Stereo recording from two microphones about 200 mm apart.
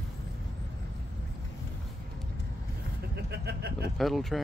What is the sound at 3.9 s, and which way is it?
Speech, centre (ahead or behind).